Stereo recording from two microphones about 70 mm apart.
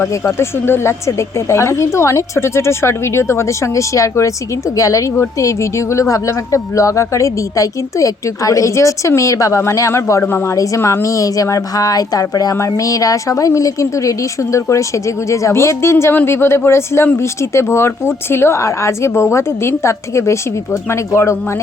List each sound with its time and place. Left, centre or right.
0.1 s a woman's voice: left
12.5 s a woman's voice: left